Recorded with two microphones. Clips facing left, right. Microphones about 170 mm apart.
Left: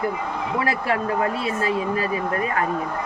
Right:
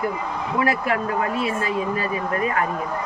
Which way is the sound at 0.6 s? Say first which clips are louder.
Right 2 dB; 30° left (ahead or behind).